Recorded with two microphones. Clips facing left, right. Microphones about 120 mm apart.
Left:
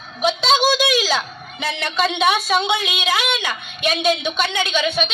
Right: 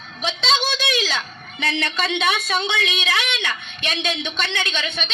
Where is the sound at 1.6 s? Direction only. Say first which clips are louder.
Left 3 dB; 5° left (ahead or behind).